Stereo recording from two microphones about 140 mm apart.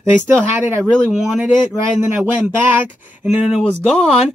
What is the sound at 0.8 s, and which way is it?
Speech, 5° left (ahead or behind).